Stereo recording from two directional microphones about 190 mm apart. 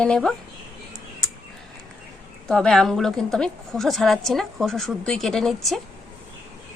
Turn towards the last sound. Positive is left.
turn(degrees=0)  # may be behind; listen again after turning